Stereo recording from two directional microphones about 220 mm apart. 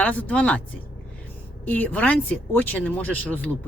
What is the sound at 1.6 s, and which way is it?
Speech, 5° left (ahead or behind).